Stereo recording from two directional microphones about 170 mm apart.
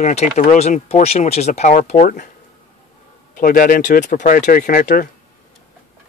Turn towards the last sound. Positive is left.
turn(degrees=55)  # may be behind; listen again after turning